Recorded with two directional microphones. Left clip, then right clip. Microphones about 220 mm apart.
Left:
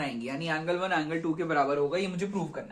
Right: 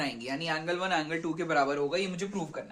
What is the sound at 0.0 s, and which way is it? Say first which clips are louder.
Speech: even; 35° right (ahead or behind).